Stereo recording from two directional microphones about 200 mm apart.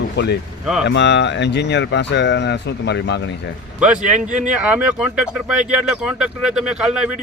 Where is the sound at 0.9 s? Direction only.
60° left (ahead or behind).